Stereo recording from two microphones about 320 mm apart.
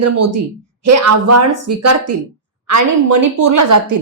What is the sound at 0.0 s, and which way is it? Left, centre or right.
A woman's voice, right.